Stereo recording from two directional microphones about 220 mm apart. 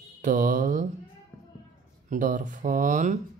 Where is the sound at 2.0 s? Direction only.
35° right (ahead or behind).